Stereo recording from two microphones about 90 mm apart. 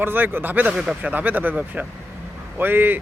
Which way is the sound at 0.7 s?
5° right (ahead or behind).